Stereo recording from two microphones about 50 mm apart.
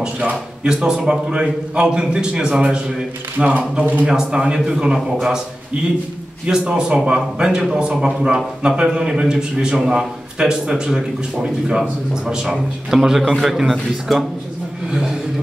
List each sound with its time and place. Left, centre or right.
0.7 s a man's voice: centre; by 4.0 s right
4.0 s a man's voice: centre
6.4 s a man's voice: centre
14.9 s speech: centre